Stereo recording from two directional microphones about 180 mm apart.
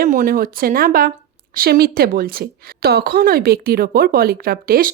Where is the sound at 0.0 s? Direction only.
50° right (ahead or behind).